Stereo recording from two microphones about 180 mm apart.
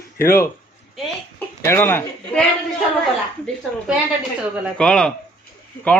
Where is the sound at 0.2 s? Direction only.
15° left (ahead or behind).